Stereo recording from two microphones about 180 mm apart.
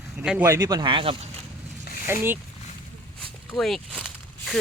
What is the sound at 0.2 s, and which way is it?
Speech, 10° right (ahead or behind).